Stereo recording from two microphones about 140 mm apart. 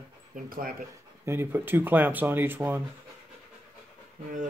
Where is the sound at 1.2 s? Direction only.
15° right (ahead or behind).